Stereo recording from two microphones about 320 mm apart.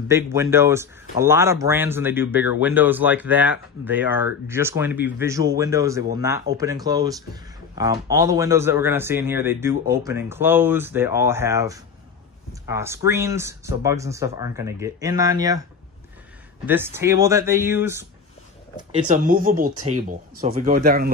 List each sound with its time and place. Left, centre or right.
0.1 s speech: centre
16.6 s speech: centre
19.0 s speech: right